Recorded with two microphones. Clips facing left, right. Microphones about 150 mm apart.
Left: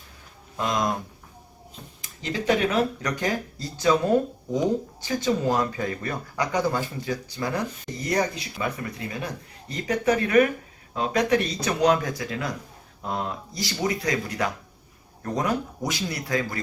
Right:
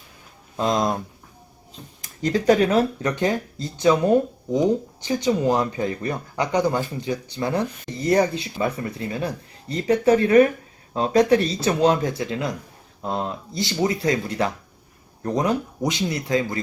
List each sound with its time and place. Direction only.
0.5 s speech: 25° right (ahead or behind)
2.0 s speech: 45° right (ahead or behind); by 16.6 s 25° right (ahead or behind)